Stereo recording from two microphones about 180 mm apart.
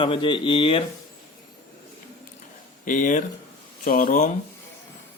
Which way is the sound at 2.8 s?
45° left (ahead or behind).